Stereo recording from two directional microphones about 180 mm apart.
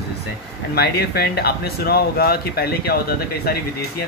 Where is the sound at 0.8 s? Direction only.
60° left (ahead or behind).